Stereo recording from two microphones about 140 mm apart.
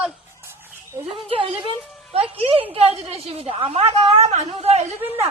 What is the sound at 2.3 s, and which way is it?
A woman's voice, 40° right (ahead or behind).